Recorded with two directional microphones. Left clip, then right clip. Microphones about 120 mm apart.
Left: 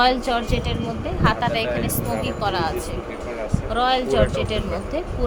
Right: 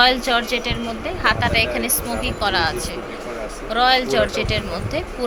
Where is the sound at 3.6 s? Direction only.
5° left (ahead or behind).